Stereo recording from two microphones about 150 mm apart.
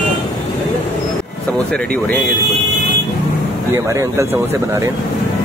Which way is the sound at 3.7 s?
20° right (ahead or behind).